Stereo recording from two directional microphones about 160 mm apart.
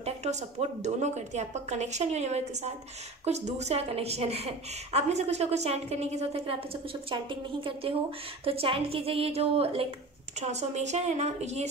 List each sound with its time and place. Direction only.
0.0 s a woman's voice: 45° right (ahead or behind)